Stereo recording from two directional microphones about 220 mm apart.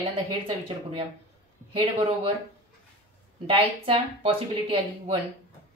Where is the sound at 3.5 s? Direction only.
25° right (ahead or behind).